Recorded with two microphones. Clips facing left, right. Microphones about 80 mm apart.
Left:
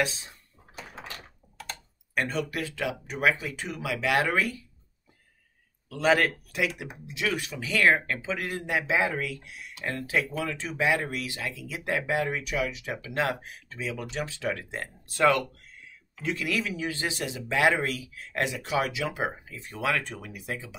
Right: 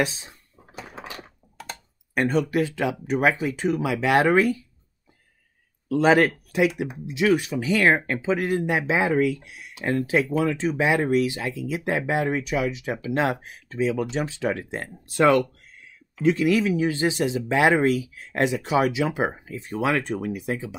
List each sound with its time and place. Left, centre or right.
0.7 s a sound: centre
2.1 s speech: right
5.9 s speech: right